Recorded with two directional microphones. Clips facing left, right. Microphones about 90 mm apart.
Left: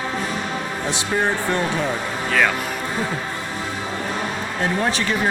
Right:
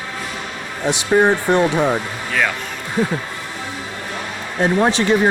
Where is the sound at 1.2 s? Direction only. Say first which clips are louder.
Right 7 dB; 20° right (ahead or behind).